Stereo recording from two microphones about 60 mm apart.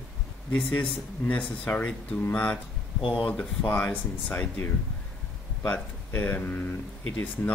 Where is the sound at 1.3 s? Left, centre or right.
Left.